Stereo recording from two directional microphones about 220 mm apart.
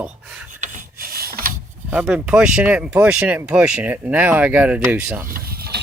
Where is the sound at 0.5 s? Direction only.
35° right (ahead or behind).